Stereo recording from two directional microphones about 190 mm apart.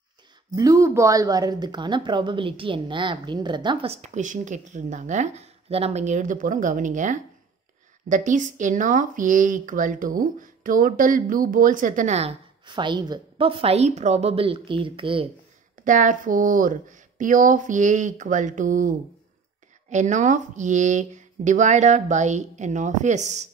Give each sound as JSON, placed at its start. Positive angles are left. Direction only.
{"t": 0.6, "sound": "speech", "side_deg": -15}
{"t": 15.8, "sound": "speech", "side_deg": -45}